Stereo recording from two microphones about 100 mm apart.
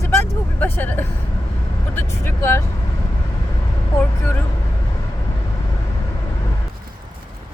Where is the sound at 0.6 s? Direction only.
20° left (ahead or behind).